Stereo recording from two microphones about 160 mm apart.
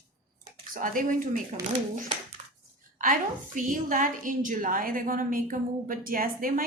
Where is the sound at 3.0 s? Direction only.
55° right (ahead or behind).